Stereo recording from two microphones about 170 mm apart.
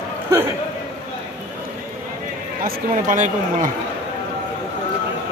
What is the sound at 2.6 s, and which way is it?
Speech, 50° right (ahead or behind).